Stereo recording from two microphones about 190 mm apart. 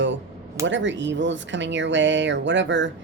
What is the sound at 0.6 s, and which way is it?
A woman's voice, 70° right (ahead or behind).